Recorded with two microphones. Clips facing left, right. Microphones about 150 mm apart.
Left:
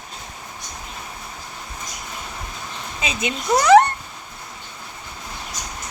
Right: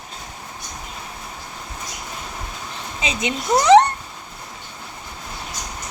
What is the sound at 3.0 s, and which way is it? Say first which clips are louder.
Speech: right 1 dB; 20° right (ahead or behind).